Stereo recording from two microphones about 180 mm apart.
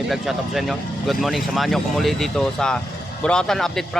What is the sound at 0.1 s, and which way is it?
Speech, centre (ahead or behind).